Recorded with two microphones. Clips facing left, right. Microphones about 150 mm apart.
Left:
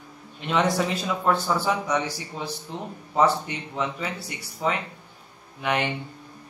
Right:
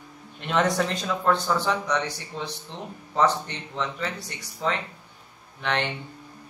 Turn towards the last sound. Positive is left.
turn(degrees=10)  # may be behind; listen again after turning